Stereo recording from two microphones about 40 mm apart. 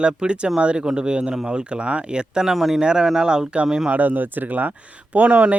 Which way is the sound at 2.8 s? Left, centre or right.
Centre.